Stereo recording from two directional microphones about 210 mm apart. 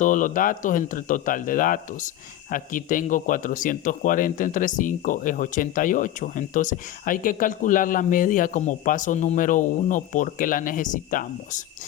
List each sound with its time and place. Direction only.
0.0 s a man's voice: 40° left (ahead or behind)